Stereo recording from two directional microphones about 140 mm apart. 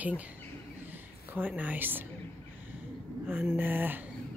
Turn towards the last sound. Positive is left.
turn(degrees=-15)  # may be behind; listen again after turning